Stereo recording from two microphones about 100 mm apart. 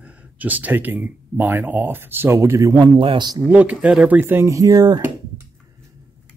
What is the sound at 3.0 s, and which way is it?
Speech, 60° right (ahead or behind).